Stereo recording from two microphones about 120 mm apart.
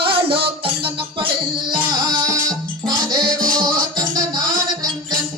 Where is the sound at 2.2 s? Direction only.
30° right (ahead or behind).